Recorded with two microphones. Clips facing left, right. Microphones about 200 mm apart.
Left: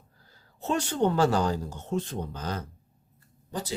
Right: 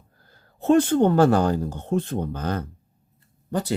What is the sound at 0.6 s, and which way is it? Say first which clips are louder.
Speech: right 9 dB; 55° right (ahead or behind).